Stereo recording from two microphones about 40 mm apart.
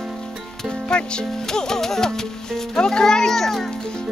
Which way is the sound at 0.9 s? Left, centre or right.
Left.